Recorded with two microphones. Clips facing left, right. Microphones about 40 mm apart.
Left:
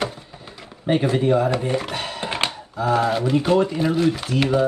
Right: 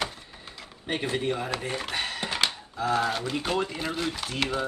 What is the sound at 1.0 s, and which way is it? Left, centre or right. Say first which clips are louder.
Speech: left 6 dB; left.